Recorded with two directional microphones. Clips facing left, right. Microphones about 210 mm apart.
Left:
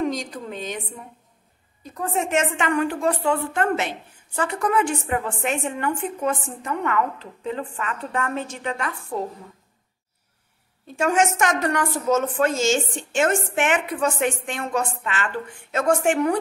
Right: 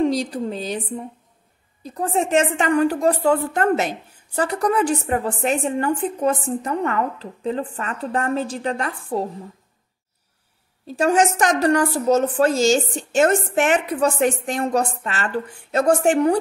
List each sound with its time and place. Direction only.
0.0 s a woman's voice: 35° right (ahead or behind)
10.9 s a woman's voice: 35° right (ahead or behind)